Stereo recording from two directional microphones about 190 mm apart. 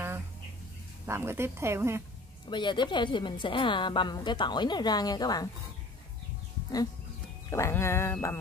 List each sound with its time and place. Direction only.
1.0 s speech: 15° right (ahead or behind)
2.5 s a woman's voice: 25° left (ahead or behind)
7.4 s speech: 15° left (ahead or behind)